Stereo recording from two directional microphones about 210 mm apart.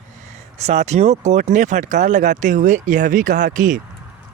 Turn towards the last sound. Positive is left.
turn(degrees=-35)  # may be behind; listen again after turning